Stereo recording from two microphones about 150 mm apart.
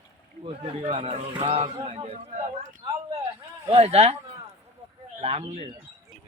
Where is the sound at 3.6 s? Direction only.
40° right (ahead or behind).